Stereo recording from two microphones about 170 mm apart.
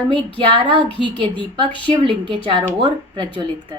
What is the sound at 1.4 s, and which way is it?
Speech, 30° left (ahead or behind).